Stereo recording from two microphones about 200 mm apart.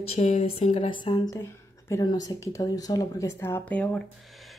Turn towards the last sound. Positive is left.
turn(degrees=5)  # may be behind; listen again after turning